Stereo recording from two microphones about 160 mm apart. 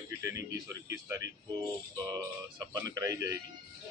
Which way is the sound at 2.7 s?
20° right (ahead or behind).